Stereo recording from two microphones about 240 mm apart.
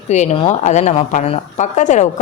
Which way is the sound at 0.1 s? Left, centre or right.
Left.